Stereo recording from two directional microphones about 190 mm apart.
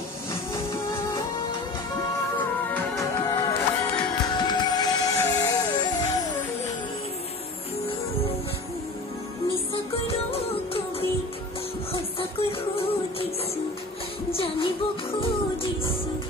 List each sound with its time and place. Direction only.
2.7 s music: 15° left (ahead or behind)
10.0 s music: 30° left (ahead or behind)
14.3 s music: 30° left (ahead or behind)